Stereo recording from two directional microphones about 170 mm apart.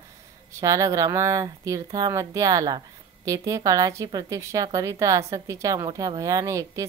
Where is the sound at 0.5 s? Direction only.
20° right (ahead or behind).